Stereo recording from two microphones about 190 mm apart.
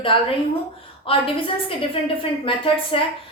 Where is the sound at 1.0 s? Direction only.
30° left (ahead or behind).